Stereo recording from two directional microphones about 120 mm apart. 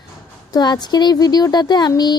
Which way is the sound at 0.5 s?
35° left (ahead or behind).